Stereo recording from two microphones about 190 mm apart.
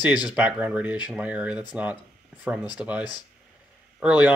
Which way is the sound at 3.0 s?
20° left (ahead or behind).